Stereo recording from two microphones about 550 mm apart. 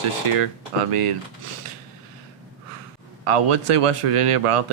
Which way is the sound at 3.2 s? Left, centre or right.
Right.